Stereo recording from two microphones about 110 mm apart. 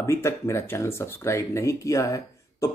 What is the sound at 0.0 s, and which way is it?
Speech, 25° left (ahead or behind).